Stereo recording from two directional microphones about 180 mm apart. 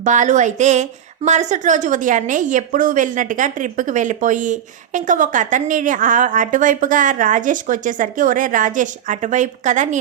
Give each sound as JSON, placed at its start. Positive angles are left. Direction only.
{"t": 0.0, "sound": "a woman's voice", "side_deg": -40}